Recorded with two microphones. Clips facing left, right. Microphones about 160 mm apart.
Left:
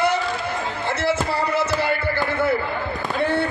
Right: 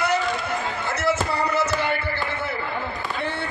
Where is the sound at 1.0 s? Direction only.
30° left (ahead or behind).